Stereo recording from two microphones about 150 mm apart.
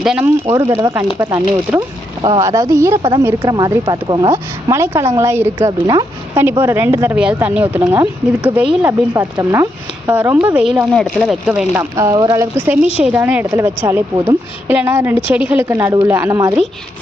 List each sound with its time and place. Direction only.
0.0 s speech: 5° right (ahead or behind)
0.5 s speech: 20° right (ahead or behind)
2.4 s speech: 20° right (ahead or behind)
3.0 s speech: 30° right (ahead or behind)
3.2 s speech: 20° right (ahead or behind)
3.8 s speech: 30° right (ahead or behind)
4.3 s speech: 20° right (ahead or behind)
12.5 s speech: 10° right (ahead or behind)